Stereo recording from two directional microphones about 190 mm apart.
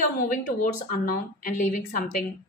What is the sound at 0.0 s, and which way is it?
Speech, 45° left (ahead or behind).